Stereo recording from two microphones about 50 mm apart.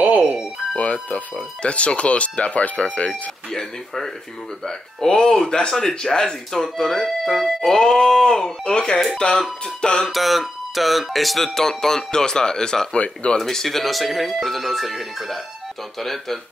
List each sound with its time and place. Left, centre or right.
0.2 s music: centre
1.1 s speech: left
3.5 s speech: centre
7.8 s speech: centre
9.8 s music: centre
10.0 s speech: centre; by 13.4 s left
13.4 s speech: centre